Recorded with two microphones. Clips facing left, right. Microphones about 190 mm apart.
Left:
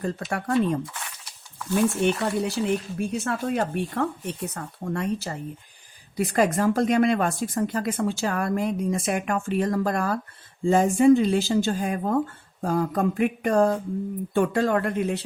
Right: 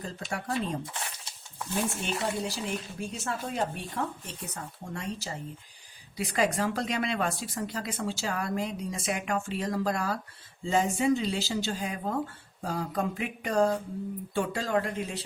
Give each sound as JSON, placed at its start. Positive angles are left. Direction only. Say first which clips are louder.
{"t": 0.0, "sound": "speech", "louder": "left 7 dB", "side_deg": 60}
{"t": 0.9, "sound": "a sound", "louder": "even", "side_deg": -25}
{"t": 2.0, "sound": "speech", "louder": "left 8 dB", "side_deg": 65}